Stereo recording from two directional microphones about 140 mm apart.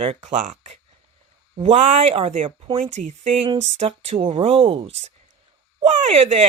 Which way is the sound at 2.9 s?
60° right (ahead or behind).